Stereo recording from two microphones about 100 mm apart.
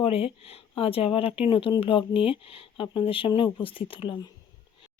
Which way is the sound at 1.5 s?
55° left (ahead or behind).